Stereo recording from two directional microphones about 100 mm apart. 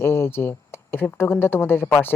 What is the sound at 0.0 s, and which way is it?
Speech, 25° left (ahead or behind).